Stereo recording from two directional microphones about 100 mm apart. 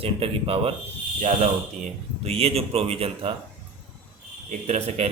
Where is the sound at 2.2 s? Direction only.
90° right.